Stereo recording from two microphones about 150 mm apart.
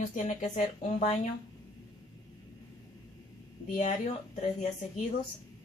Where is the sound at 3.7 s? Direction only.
50° left (ahead or behind).